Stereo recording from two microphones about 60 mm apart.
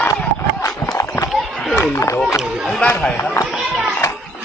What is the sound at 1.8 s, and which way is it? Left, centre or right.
Speech, left.